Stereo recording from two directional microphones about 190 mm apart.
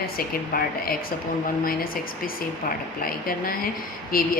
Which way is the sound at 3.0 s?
50° left (ahead or behind).